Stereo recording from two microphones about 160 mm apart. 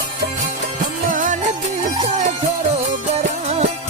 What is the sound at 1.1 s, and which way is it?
Music, 55° right (ahead or behind).